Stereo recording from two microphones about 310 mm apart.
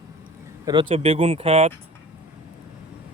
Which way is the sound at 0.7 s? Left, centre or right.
Centre.